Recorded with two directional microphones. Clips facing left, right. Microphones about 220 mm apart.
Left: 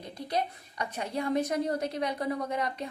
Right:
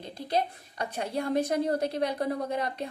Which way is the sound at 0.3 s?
30° right (ahead or behind).